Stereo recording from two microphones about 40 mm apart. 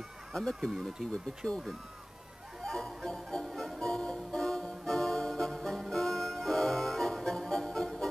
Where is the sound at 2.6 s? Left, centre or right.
Centre.